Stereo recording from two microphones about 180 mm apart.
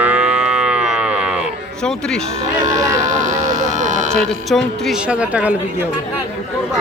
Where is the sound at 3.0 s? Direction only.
45° right (ahead or behind).